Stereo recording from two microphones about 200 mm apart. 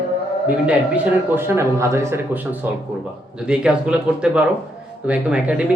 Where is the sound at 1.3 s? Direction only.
10° right (ahead or behind).